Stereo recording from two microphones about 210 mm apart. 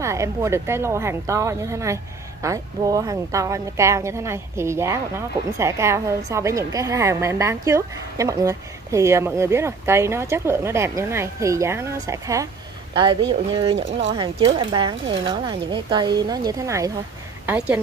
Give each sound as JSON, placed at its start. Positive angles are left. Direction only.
{"t": 0.0, "sound": "a woman's voice", "side_deg": -15}